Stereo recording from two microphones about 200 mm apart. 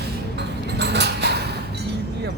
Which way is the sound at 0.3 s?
55° right (ahead or behind).